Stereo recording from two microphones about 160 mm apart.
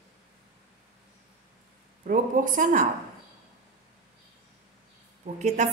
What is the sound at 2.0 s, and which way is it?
Speech, 55° right (ahead or behind).